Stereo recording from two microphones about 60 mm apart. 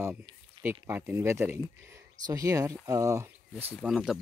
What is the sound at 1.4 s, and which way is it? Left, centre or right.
Speech, right.